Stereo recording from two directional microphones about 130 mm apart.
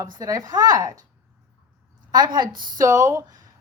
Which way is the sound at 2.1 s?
35° right (ahead or behind).